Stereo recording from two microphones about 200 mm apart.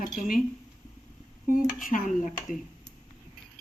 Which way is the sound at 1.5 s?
45° left (ahead or behind).